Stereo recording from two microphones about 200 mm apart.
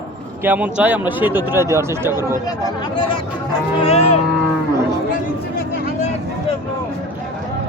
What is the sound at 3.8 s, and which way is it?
Speech, 30° left (ahead or behind).